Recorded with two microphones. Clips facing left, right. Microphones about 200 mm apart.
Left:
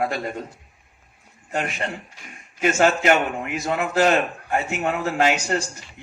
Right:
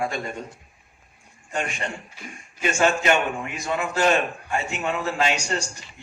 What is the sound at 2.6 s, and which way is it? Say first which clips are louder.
A man's voice: left 3 dB; 55° left (ahead or behind).